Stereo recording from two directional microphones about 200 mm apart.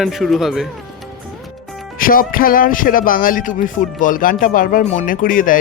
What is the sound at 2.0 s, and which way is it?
Speech, 45° left (ahead or behind).